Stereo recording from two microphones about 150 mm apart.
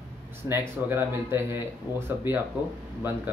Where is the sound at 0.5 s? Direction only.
15° right (ahead or behind).